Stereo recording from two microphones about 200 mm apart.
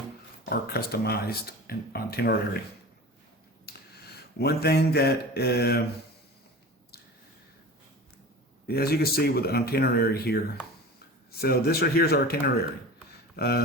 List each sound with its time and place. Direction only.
0.5 s speech: 50° left (ahead or behind)
3.7 s finger snapping: 50° left (ahead or behind)
4.4 s speech: 55° left (ahead or behind)
8.6 s speech: 50° left (ahead or behind)